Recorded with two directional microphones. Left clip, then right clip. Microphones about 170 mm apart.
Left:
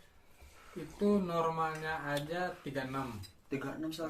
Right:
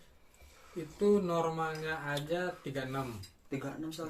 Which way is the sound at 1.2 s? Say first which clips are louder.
Even; 20° right (ahead or behind).